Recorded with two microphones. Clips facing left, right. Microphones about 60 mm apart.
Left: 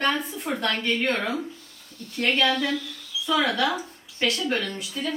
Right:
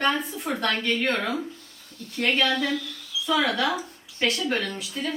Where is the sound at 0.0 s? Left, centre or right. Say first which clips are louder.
Even; centre.